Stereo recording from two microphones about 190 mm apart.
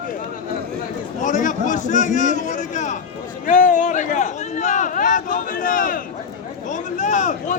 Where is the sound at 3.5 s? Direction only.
40° left (ahead or behind).